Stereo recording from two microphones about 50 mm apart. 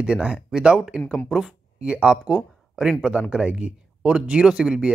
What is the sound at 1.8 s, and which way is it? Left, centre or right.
Speech, right.